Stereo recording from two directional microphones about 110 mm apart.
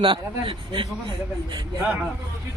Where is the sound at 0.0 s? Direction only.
50° right (ahead or behind).